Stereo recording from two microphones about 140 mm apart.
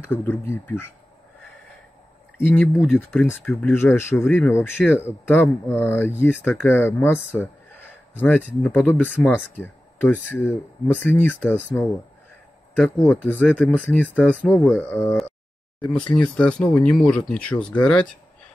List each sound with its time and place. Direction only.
0.1 s speech: 15° left (ahead or behind)
2.3 s speech: 15° left (ahead or behind)
2.7 s speech: centre (ahead or behind)
3.3 s speech: 15° left (ahead or behind)